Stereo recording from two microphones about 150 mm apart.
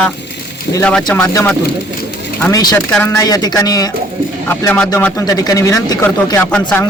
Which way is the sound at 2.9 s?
15° left (ahead or behind).